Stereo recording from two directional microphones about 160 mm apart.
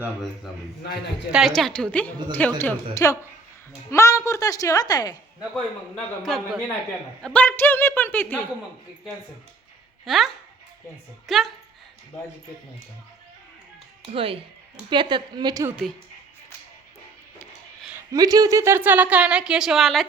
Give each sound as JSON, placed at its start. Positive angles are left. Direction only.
{"t": 1.3, "sound": "a woman's voice", "side_deg": 0}
{"t": 6.2, "sound": "a woman's voice", "side_deg": 0}
{"t": 10.1, "sound": "a woman's voice", "side_deg": 0}
{"t": 11.3, "sound": "a woman's voice", "side_deg": 0}
{"t": 14.0, "sound": "a woman's voice", "side_deg": -35}
{"t": 18.1, "sound": "speech", "side_deg": -20}